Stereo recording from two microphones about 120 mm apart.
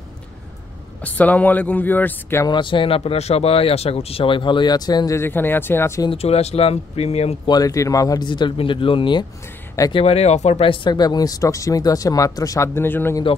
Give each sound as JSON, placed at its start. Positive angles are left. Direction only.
{"t": 1.0, "sound": "speech", "side_deg": 15}
{"t": 2.4, "sound": "speech", "side_deg": 40}
{"t": 5.2, "sound": "speech", "side_deg": 15}
{"t": 6.0, "sound": "speech", "side_deg": 60}
{"t": 7.4, "sound": "speech", "side_deg": 30}
{"t": 9.9, "sound": "speech", "side_deg": 60}
{"t": 10.7, "sound": "speech", "side_deg": 40}